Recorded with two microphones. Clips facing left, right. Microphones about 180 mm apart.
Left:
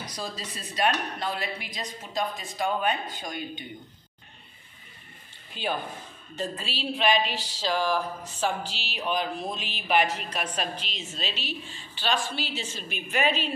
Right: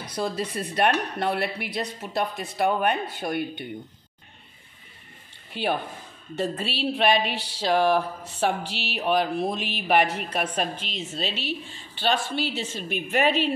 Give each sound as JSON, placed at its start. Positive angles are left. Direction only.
{"t": 0.2, "sound": "speech", "side_deg": -60}
{"t": 6.4, "sound": "speech", "side_deg": -60}